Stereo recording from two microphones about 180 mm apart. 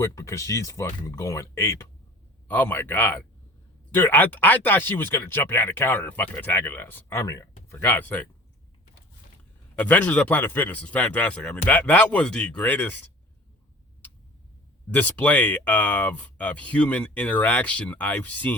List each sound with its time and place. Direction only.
0.0 s speech: 15° left (ahead or behind)
9.7 s speech: 10° left (ahead or behind)
14.8 s speech: 10° left (ahead or behind)